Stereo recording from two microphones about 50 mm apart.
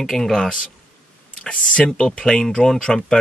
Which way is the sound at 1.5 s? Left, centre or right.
Left.